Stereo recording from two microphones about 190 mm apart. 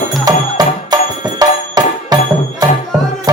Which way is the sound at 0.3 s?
20° right (ahead or behind).